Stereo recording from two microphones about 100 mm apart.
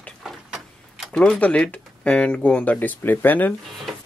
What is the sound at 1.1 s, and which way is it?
Speech, 10° left (ahead or behind).